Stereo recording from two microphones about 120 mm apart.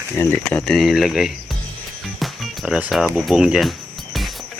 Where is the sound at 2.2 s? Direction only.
5° right (ahead or behind).